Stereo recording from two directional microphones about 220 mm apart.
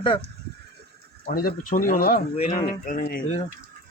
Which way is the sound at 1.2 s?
40° left (ahead or behind).